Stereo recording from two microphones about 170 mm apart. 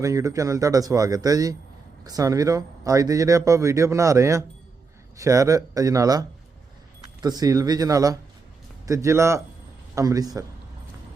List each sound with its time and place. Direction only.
0.0 s a man's voice: 20° right (ahead or behind)